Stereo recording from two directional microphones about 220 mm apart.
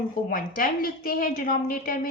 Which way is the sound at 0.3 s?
40° left (ahead or behind).